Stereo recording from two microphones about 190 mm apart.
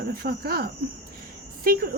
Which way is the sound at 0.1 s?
55° right (ahead or behind).